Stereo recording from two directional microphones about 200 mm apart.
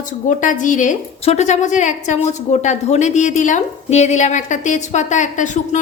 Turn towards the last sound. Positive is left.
turn(degrees=35)  # may be behind; listen again after turning